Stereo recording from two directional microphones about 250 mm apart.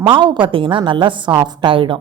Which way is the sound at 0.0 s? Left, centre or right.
Centre.